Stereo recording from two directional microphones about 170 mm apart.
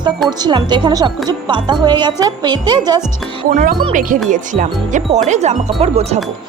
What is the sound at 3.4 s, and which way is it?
Speech, 50° right (ahead or behind).